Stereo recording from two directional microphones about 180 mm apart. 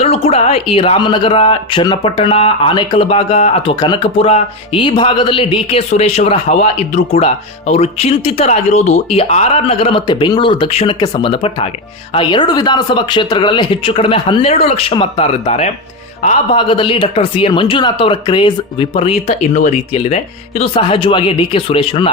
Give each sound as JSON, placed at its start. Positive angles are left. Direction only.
{"t": 0.0, "sound": "a man's voice", "side_deg": 35}